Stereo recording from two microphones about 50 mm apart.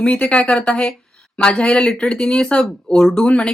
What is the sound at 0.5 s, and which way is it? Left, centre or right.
Speech, centre.